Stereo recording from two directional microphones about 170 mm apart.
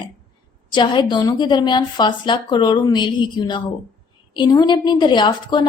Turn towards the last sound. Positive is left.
turn(degrees=25)  # may be behind; listen again after turning